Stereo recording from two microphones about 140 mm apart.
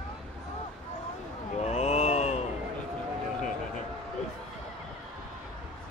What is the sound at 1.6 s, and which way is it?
Mantra, 50° left (ahead or behind).